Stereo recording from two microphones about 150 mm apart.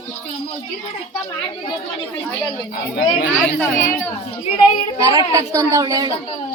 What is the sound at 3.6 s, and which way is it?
Speech, 15° left (ahead or behind).